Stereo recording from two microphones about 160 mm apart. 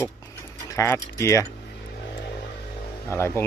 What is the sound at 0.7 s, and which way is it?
Speech, 15° left (ahead or behind).